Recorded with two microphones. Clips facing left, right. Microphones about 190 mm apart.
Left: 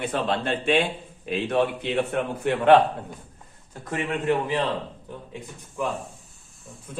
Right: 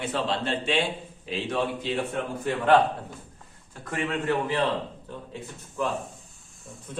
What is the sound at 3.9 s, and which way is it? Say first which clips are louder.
Speech: left 2 dB; 20° left (ahead or behind).